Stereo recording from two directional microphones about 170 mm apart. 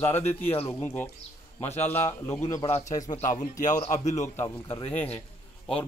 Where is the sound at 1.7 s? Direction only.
40° left (ahead or behind).